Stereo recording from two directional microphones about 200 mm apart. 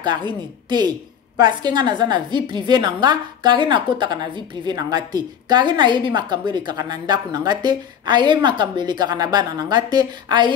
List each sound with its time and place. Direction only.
0.0 s a woman's voice: 20° right (ahead or behind)